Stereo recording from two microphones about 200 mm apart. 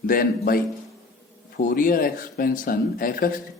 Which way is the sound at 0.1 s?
45° left (ahead or behind).